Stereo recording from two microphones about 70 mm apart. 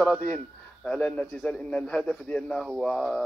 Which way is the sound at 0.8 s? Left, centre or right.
Centre.